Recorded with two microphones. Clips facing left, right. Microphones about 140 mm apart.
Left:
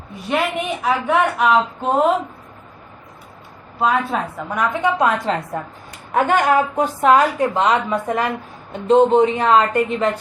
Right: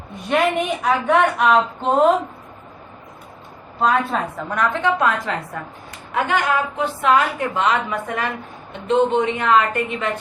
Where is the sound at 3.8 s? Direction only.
5° left (ahead or behind).